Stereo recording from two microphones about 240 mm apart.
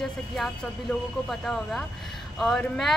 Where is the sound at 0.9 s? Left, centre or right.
Centre.